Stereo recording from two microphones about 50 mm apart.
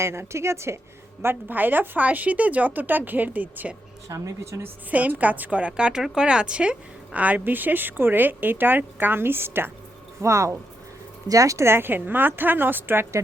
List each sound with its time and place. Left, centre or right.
0.0 s a woman's voice: right
1.2 s a woman's voice: right
4.1 s speech: right
4.9 s a woman's voice: right
10.2 s a woman's voice: right